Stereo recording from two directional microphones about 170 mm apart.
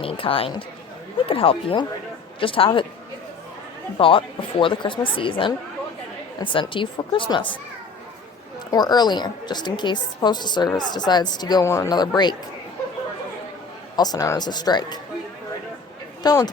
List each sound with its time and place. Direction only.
0.0 s speech: 30° left (ahead or behind)
3.9 s a woman's voice: 30° left (ahead or behind)
8.7 s a woman's voice: 25° left (ahead or behind)
13.9 s a woman's voice: 25° left (ahead or behind)
16.2 s a woman's voice: 20° left (ahead or behind)